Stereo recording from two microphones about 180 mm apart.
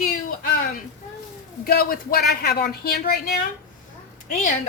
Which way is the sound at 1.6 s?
55° left (ahead or behind).